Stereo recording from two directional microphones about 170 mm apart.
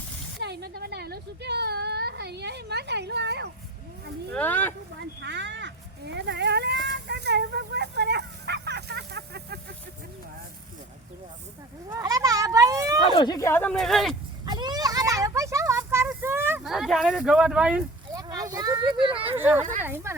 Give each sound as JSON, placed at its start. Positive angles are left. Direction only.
{"t": 0.3, "sound": "speech", "side_deg": -75}
{"t": 4.3, "sound": "speech", "side_deg": 10}
{"t": 4.9, "sound": "speech", "side_deg": -90}
{"t": 6.8, "sound": "a sound", "side_deg": -75}
{"t": 11.9, "sound": "speech", "side_deg": -20}
{"t": 13.1, "sound": "speech", "side_deg": 25}
{"t": 14.4, "sound": "children playing", "side_deg": -25}
{"t": 16.2, "sound": "a sound", "side_deg": -15}
{"t": 16.6, "sound": "speech", "side_deg": 0}
{"t": 18.1, "sound": "a sound", "side_deg": -20}
{"t": 18.5, "sound": "speech", "side_deg": -20}
{"t": 19.4, "sound": "speech", "side_deg": -10}